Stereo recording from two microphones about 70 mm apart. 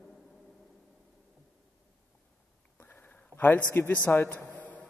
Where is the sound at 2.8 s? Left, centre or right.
Left.